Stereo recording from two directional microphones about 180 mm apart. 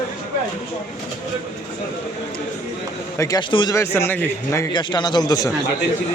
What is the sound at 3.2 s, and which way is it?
Speech, 20° left (ahead or behind).